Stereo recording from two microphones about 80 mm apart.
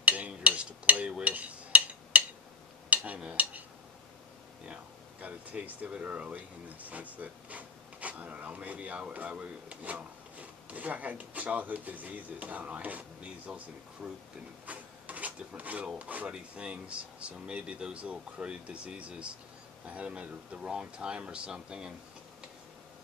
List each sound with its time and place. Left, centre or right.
0.0 s a sound: centre
3.2 s speech: centre
5.2 s speech: centre
14.7 s drawer open or close: centre
16.0 s speech: centre